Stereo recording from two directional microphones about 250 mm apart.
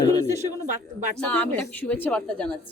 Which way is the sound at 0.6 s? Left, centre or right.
Right.